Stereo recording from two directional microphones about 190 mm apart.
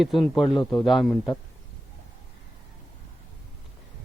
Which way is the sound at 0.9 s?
Centre (ahead or behind).